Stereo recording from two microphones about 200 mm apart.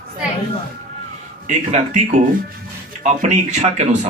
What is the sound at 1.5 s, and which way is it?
A man's voice, 35° right (ahead or behind).